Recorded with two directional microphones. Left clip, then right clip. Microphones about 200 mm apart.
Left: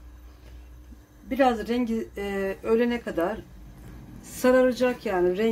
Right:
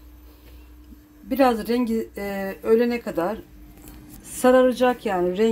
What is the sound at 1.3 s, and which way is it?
A woman's voice, 30° right (ahead or behind).